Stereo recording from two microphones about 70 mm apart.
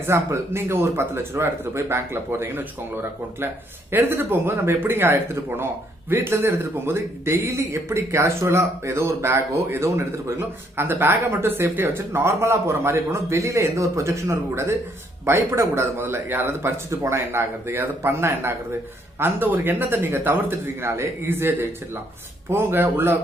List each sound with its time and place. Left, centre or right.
0.0 s speech: right
17.3 s a man's voice: right